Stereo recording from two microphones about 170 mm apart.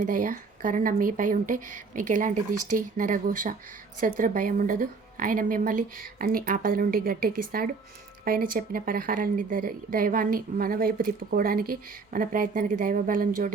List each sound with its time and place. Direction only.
0.0 s speech: 50° right (ahead or behind)